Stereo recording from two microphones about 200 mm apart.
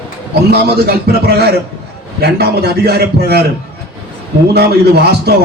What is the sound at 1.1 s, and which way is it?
A man's voice, 50° right (ahead or behind).